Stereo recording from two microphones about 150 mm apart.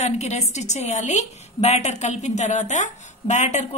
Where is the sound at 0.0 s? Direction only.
50° left (ahead or behind).